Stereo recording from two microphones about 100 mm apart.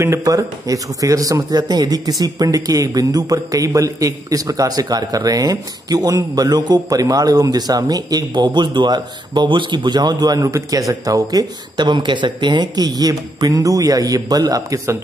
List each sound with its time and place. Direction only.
0.0 s a man's voice: 30° right (ahead or behind)